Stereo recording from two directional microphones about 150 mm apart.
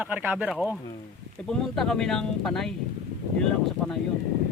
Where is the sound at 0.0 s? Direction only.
10° right (ahead or behind).